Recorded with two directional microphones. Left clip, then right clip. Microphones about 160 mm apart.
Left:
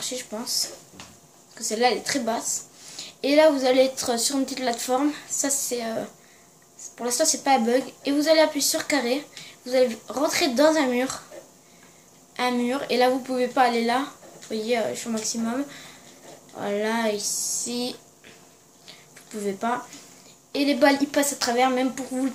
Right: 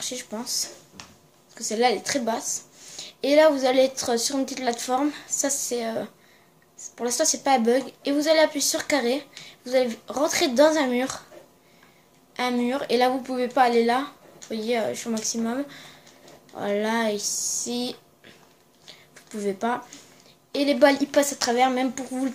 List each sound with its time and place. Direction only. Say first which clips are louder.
0.0 s a woman's voice: left 1 dB; 35° right (ahead or behind)
12.4 s a woman's voice: left 1 dB; 35° right (ahead or behind)
18.9 s a sound: even; 35° right (ahead or behind)
20.5 s a woman's voice: right 1 dB; 35° right (ahead or behind)